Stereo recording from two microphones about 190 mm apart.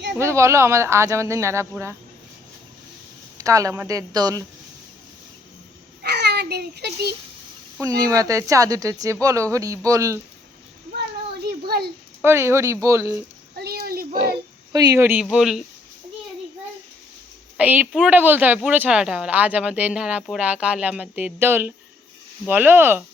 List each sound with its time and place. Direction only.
0.2 s speech: 15° right (ahead or behind)
3.3 s speech: 15° right (ahead or behind)
6.0 s babbling: 60° right (ahead or behind)
7.8 s speech: 20° right (ahead or behind)
11.6 s a sound: 55° right (ahead or behind)
12.2 s speech: 15° right (ahead or behind)
13.6 s a sound: 55° right (ahead or behind)
14.7 s speech: 20° right (ahead or behind); by 15.6 s centre (ahead or behind)
17.6 s speech: 10° right (ahead or behind)